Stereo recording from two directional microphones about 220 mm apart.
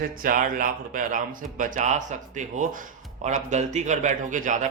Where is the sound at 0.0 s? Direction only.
40° right (ahead or behind).